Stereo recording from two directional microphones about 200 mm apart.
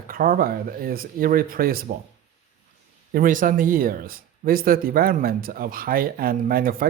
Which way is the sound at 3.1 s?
40° right (ahead or behind).